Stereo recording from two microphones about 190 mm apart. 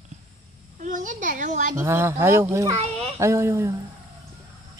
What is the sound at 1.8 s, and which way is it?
Speech, 15° right (ahead or behind).